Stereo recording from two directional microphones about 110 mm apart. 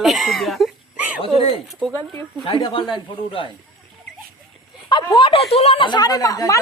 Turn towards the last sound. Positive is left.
turn(degrees=35)  # may be behind; listen again after turning